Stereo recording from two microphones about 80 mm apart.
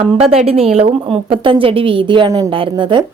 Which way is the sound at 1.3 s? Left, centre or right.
Right.